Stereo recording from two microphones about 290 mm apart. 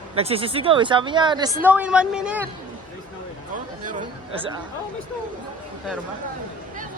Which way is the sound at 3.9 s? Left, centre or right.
Centre.